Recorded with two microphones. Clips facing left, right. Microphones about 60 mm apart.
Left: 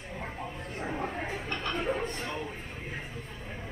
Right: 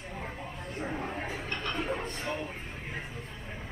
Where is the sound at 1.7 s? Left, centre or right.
Centre.